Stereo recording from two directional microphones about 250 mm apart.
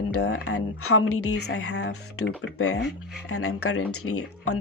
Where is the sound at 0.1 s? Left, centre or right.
Left.